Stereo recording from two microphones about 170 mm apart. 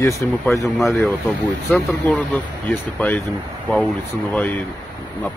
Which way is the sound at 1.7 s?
10° left (ahead or behind).